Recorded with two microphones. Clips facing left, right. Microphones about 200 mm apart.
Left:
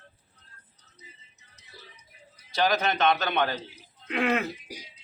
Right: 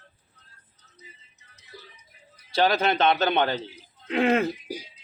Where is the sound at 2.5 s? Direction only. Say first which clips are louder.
Right 3 dB; 30° right (ahead or behind).